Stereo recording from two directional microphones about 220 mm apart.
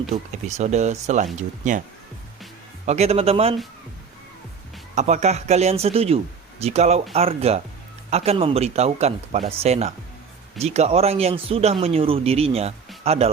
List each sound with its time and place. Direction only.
0.1 s speech: 30° right (ahead or behind)
2.8 s a man's voice: 30° right (ahead or behind)
4.9 s a man's voice: 30° right (ahead or behind)